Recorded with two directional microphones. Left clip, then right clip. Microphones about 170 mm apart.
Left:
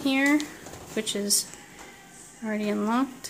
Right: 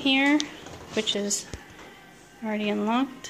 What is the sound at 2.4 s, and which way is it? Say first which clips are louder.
Speech: right 1 dB; 5° left (ahead or behind).